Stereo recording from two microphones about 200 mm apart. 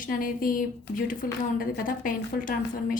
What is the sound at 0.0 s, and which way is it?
A woman's voice, 45° left (ahead or behind).